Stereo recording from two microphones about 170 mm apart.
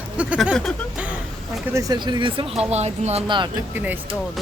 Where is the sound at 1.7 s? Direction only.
20° right (ahead or behind).